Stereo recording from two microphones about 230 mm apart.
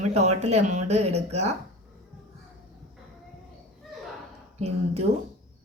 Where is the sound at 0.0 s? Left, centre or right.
Right.